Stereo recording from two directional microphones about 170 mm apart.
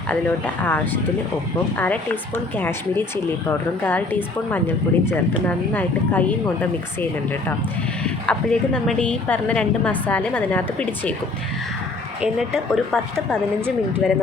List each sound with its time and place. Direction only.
0.1 s a woman's voice: 10° left (ahead or behind)
12.2 s speech: centre (ahead or behind)